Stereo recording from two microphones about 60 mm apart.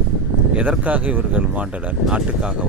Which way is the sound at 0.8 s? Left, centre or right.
Right.